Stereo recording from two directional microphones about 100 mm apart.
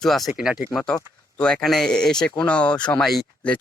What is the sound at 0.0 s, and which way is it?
Speech, centre (ahead or behind).